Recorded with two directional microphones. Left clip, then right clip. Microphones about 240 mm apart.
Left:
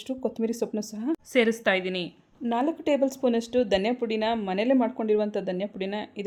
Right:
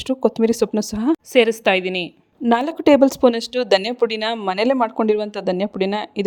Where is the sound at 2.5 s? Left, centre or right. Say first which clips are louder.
Right 10 dB; right.